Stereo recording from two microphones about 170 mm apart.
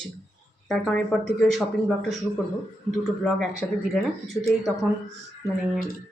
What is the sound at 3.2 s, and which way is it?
Speech, centre (ahead or behind).